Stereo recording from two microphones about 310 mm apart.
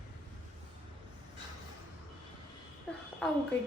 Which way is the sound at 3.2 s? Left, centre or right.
Centre.